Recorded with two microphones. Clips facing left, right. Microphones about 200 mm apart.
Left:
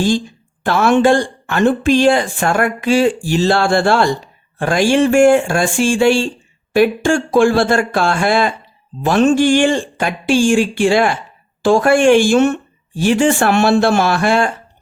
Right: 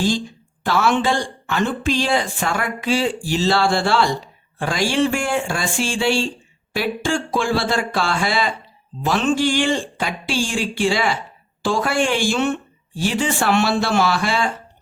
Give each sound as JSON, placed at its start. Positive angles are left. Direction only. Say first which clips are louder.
{"t": 0.6, "sound": "speech", "louder": "left 6 dB", "side_deg": 50}